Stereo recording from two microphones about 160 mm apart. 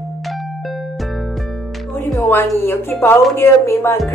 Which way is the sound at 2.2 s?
15° left (ahead or behind).